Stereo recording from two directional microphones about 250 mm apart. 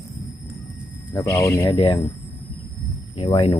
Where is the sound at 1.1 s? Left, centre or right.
Centre.